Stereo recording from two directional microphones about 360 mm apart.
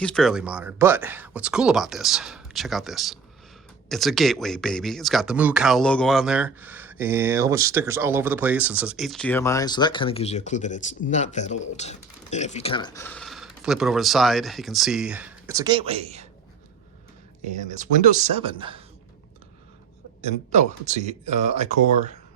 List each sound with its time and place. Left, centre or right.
0.0 s speech: centre
17.7 s speech: right
20.2 s speech: centre